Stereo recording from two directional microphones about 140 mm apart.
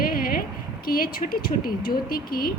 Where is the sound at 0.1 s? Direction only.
90° left.